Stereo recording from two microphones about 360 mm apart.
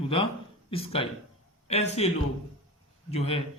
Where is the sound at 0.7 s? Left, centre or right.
Centre.